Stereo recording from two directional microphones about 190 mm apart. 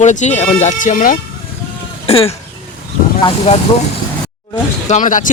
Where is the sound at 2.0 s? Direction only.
30° left (ahead or behind).